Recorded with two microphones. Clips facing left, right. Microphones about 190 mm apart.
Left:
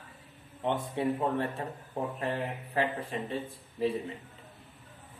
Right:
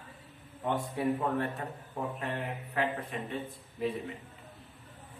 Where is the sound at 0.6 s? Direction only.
25° left (ahead or behind).